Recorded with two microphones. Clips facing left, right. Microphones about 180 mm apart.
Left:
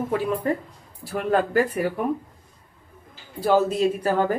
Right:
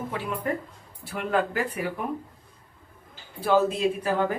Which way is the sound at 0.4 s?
35° left (ahead or behind).